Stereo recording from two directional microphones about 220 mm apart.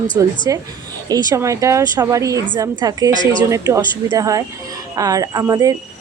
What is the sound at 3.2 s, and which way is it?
Speech, 20° left (ahead or behind).